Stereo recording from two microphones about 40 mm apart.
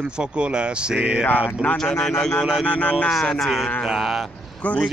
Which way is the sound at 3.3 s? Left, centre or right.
Centre.